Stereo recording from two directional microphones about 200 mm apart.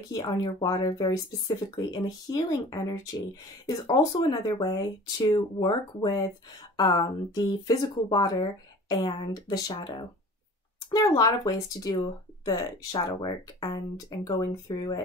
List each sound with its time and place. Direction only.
0.1 s speech: 20° left (ahead or behind)